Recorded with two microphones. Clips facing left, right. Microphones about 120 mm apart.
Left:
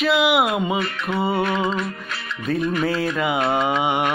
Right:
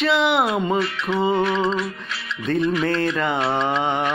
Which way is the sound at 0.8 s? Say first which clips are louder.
Right 2 dB; 50° left (ahead or behind).